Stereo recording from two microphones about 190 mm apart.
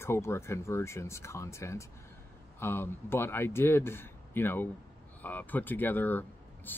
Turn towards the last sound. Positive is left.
turn(degrees=10)  # may be behind; listen again after turning